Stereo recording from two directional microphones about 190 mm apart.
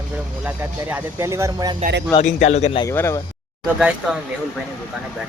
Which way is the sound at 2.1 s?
40° left (ahead or behind).